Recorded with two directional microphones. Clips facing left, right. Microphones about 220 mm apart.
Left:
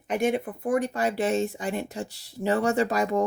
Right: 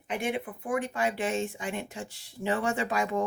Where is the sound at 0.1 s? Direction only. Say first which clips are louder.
Left 6 dB; 40° left (ahead or behind).